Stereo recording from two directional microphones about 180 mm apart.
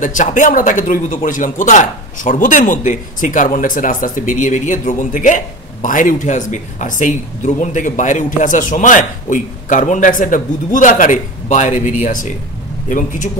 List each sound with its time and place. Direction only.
0.0 s speech: 45° left (ahead or behind)